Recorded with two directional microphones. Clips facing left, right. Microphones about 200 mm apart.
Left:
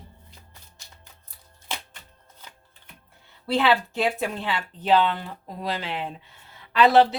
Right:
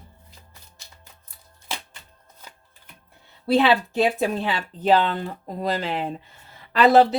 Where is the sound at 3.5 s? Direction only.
35° right (ahead or behind).